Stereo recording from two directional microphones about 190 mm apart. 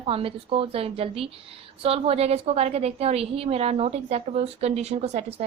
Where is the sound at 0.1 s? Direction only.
30° right (ahead or behind).